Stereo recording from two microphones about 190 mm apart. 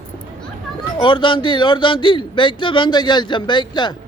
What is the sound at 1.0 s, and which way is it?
A man's voice, 25° left (ahead or behind).